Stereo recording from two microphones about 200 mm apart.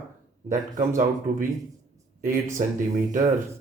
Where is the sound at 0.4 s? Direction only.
40° right (ahead or behind).